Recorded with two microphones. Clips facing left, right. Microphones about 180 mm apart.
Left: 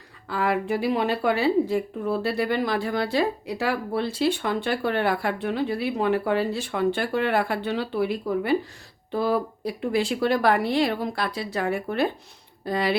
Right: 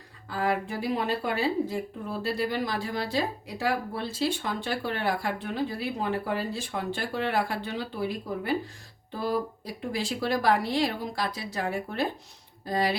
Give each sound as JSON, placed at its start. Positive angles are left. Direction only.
{"t": 0.3, "sound": "speech", "side_deg": 70}